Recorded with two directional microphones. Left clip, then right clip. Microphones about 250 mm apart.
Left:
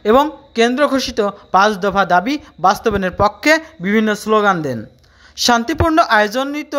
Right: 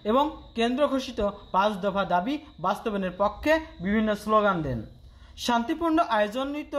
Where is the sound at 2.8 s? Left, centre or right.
Left.